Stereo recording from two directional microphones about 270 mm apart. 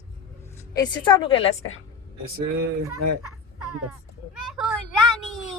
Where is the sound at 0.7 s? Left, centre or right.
Centre.